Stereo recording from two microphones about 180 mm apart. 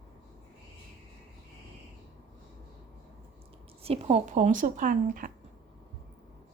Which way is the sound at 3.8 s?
35° right (ahead or behind).